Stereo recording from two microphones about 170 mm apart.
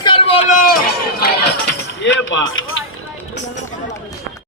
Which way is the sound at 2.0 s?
90° left.